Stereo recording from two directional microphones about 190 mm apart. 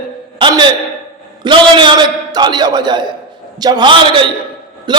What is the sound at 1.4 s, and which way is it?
A man's voice, 25° right (ahead or behind).